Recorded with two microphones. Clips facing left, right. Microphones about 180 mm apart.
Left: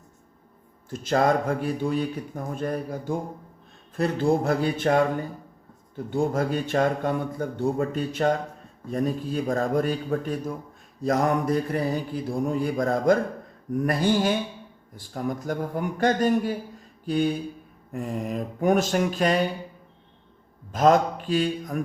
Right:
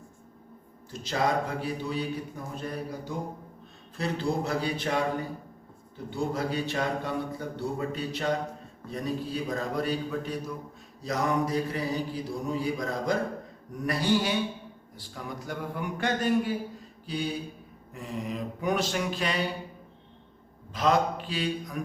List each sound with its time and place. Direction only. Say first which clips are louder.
0.9 s a man's voice: left 6 dB; 50° left (ahead or behind)
6.1 s a man's voice: left 6 dB; 50° left (ahead or behind)
20.7 s a man's voice: left 6 dB; 45° left (ahead or behind)